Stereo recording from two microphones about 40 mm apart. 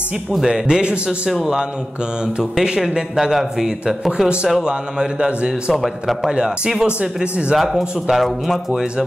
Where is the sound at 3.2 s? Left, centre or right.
Centre.